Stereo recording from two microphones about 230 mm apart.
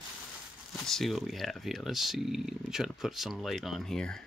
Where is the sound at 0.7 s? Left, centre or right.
Centre.